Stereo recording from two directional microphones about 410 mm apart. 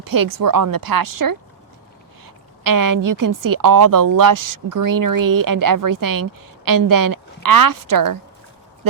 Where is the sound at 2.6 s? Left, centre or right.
Right.